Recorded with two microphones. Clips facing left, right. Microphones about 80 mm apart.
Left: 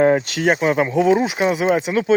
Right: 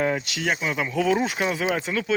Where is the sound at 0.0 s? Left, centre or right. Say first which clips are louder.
Left 9 dB; left.